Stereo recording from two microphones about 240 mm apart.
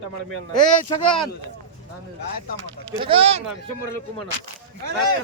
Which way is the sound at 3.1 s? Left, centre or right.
Right.